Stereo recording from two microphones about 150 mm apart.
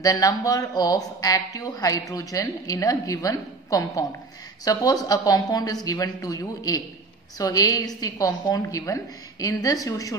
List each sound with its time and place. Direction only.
0.0 s speech: 25° left (ahead or behind)